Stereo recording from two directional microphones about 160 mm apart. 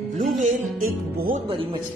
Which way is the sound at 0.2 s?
50° right (ahead or behind).